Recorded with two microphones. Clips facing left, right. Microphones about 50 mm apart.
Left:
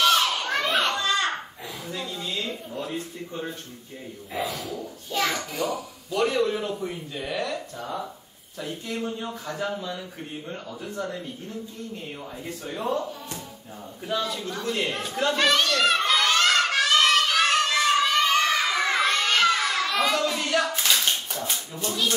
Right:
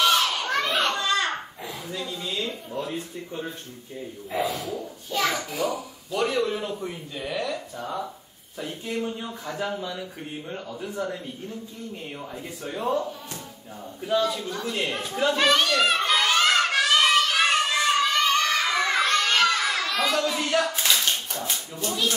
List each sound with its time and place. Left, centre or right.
0.0 s children playing: centre
2.0 s a sound: centre
2.9 s a child's voice: centre
4.3 s speech: centre
5.1 s a child's voice: centre
8.5 s speech: centre
12.7 s a child's voice: centre
14.0 s a sound: centre
18.7 s children shouting: centre
19.3 s a sound: centre
19.9 s child singing: centre
20.3 s clapping: centre
21.3 s speech: centre